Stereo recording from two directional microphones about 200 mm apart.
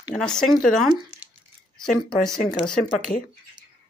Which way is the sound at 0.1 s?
5° left (ahead or behind).